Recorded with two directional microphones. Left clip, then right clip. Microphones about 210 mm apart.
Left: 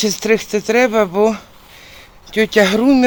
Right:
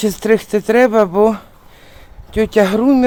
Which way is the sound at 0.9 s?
10° right (ahead or behind).